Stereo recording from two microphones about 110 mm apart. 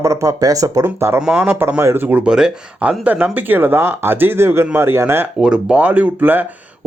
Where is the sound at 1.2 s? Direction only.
10° right (ahead or behind).